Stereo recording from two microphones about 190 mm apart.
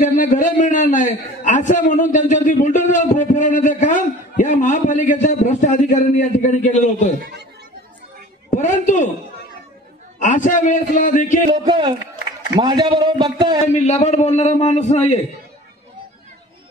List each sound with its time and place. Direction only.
0.0 s a man's voice: 40° left (ahead or behind)
8.5 s a man's voice: 40° left (ahead or behind)
10.1 s a man's voice: 40° left (ahead or behind)
11.5 s a man's voice: 20° right (ahead or behind)
13.7 s a man's voice: 35° left (ahead or behind)